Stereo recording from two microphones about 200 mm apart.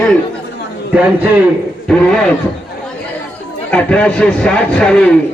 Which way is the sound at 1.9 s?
5° left (ahead or behind).